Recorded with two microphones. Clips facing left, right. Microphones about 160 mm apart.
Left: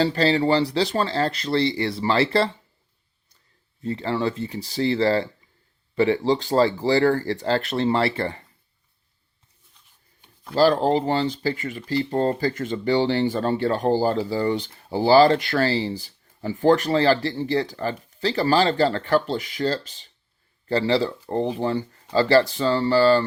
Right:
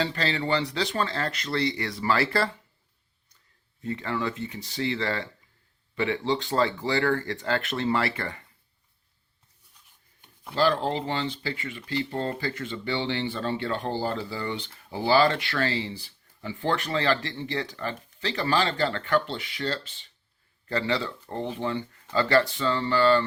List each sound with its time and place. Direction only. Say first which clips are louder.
0.0 s speech: left 8 dB; 35° left (ahead or behind)
3.8 s speech: left 5 dB; 30° left (ahead or behind)
10.5 s speech: left 6 dB; 35° left (ahead or behind)